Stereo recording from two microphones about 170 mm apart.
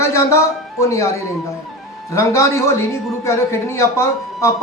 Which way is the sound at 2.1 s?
15° left (ahead or behind).